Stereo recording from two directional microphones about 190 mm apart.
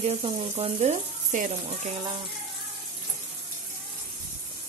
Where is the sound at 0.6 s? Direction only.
35° right (ahead or behind).